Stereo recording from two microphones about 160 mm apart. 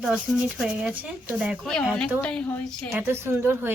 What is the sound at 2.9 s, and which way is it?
Speech, 15° right (ahead or behind).